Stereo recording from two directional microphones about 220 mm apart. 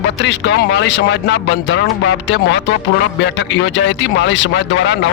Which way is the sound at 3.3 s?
55° left (ahead or behind).